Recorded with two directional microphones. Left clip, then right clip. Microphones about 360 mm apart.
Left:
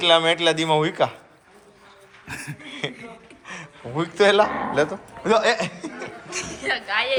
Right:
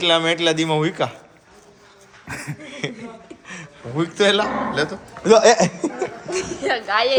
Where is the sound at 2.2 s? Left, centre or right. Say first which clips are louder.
Right 2 dB; centre.